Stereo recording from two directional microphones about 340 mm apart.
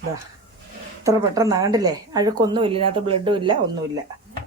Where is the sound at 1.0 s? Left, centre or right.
Centre.